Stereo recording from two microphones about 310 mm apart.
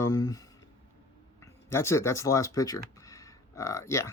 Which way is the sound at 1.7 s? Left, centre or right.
Centre.